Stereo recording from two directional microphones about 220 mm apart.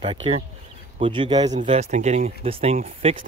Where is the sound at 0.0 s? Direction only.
25° right (ahead or behind).